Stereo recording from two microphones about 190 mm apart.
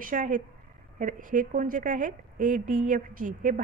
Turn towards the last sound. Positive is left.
turn(degrees=-45)  # may be behind; listen again after turning